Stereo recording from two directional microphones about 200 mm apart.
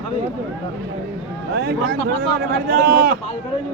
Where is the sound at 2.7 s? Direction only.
50° right (ahead or behind).